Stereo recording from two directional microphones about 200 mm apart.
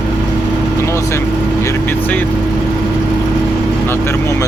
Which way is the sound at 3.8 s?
10° left (ahead or behind).